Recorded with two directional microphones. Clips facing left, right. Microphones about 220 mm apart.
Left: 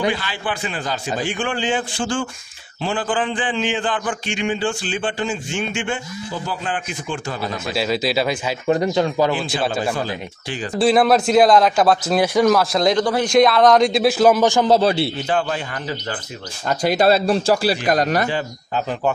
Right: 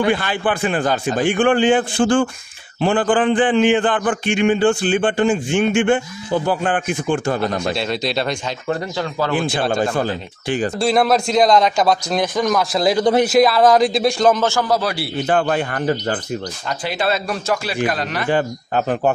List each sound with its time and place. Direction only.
0.1 s a man's voice: 55° right (ahead or behind)
7.7 s a man's voice: 5° left (ahead or behind)
8.6 s speech: 20° left (ahead or behind)
10.8 s a man's voice: 5° left (ahead or behind)
14.7 s speech: 25° left (ahead or behind)
15.2 s a man's voice: 55° right (ahead or behind)
16.6 s speech: 45° left (ahead or behind)
18.3 s a man's voice: 55° right (ahead or behind)